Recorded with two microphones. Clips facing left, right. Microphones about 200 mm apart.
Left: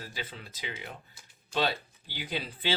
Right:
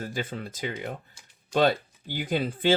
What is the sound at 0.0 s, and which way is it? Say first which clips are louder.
Speech: right 9 dB; 50° right (ahead or behind).